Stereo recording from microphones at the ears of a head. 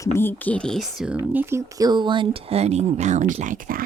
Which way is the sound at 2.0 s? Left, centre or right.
Right.